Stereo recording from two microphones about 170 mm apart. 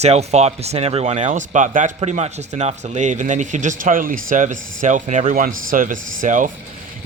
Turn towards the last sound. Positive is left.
turn(degrees=-50)  # may be behind; listen again after turning